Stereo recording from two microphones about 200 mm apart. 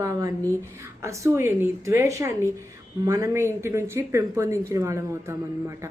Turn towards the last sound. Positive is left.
turn(degrees=-15)  # may be behind; listen again after turning